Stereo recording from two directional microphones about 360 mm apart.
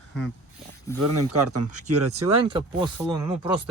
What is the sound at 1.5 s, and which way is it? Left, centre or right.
Speech, right.